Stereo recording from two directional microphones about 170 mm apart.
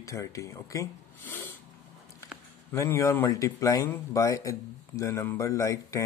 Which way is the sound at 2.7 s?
15° left (ahead or behind).